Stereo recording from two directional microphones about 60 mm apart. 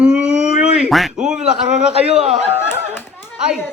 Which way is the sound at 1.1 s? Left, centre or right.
Centre.